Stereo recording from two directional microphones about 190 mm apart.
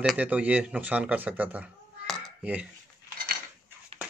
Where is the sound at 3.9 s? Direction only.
30° right (ahead or behind).